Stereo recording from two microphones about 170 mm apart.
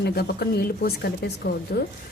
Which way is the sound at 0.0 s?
70° left (ahead or behind).